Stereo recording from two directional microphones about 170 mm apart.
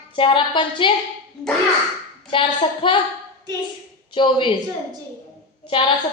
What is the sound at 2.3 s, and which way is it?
Speech, 30° left (ahead or behind).